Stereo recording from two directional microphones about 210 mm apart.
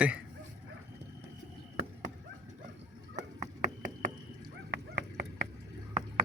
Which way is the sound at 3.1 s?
35° right (ahead or behind).